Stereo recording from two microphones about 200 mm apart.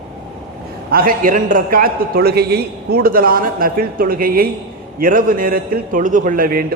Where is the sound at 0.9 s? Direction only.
45° right (ahead or behind).